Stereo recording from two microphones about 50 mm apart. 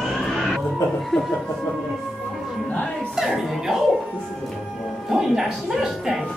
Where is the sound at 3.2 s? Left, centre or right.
Centre.